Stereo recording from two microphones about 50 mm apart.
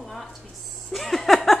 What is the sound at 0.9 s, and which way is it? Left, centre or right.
Speech, centre.